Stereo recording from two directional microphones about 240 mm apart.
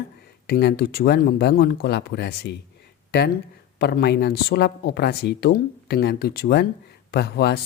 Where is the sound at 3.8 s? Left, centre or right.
Left.